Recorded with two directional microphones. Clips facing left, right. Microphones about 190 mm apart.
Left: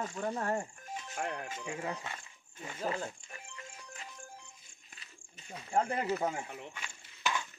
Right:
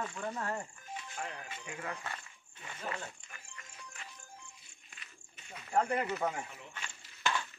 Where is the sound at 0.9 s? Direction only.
50° left (ahead or behind).